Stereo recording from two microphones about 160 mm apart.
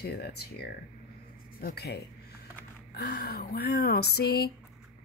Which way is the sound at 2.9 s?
75° left (ahead or behind).